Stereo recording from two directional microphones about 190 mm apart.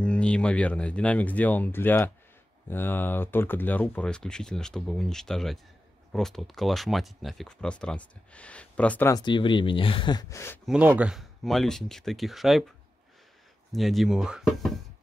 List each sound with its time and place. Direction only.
0.0 s speech: 5° left (ahead or behind)
9.1 s speech: 25° left (ahead or behind)
10.7 s speech: 5° right (ahead or behind)
13.7 s speech: centre (ahead or behind)